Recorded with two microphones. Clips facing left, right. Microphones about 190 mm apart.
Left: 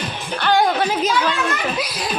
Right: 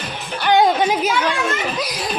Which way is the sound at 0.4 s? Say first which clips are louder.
Right 2 dB; 20° right (ahead or behind).